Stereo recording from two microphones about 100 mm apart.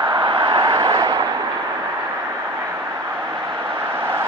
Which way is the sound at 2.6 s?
30° right (ahead or behind).